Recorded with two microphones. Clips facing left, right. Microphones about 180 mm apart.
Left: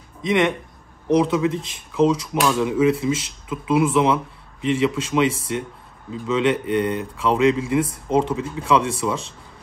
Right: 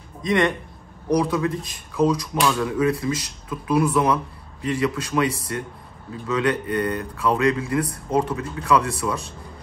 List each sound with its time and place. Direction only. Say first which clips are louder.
0.2 s a man's voice: left 1 dB; 20° left (ahead or behind)